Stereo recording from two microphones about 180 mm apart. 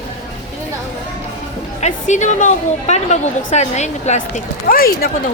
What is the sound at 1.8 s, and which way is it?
A woman's voice, 40° left (ahead or behind).